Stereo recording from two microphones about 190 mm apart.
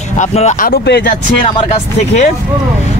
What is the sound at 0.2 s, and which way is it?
Speech, 35° left (ahead or behind).